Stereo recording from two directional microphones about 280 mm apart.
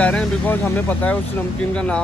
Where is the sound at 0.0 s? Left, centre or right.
Centre.